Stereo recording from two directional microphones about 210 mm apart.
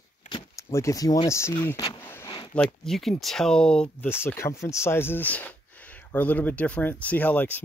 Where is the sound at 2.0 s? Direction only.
10° left (ahead or behind).